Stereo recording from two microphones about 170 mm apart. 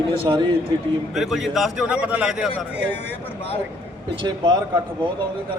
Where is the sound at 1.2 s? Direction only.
Centre (ahead or behind).